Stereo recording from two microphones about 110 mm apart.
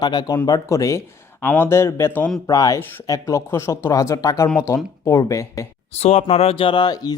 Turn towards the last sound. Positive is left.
turn(degrees=40)  # may be behind; listen again after turning